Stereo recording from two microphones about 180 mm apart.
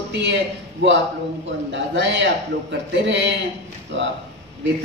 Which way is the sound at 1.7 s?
80° right.